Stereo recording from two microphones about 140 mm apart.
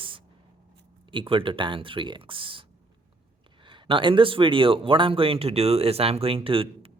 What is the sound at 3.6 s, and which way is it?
Speech, 35° right (ahead or behind).